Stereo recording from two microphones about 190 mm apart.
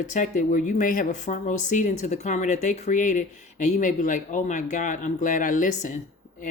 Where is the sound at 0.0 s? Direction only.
40° left (ahead or behind).